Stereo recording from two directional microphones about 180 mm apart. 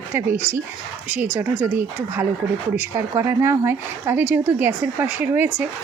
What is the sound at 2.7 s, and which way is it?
Speech, 15° right (ahead or behind).